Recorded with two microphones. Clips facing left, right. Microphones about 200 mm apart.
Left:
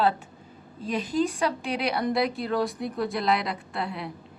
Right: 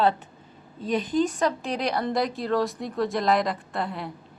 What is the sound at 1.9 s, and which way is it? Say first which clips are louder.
Speech: even; 10° left (ahead or behind).